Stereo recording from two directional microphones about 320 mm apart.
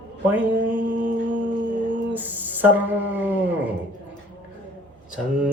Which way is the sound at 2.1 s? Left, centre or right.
Centre.